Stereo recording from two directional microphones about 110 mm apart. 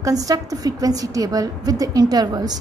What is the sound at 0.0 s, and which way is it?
A woman's voice, 30° right (ahead or behind).